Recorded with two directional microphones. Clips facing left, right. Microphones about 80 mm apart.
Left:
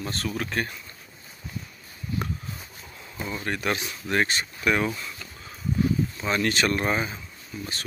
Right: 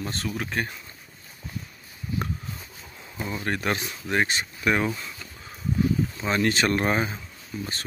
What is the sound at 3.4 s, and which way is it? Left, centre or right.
Speech, right.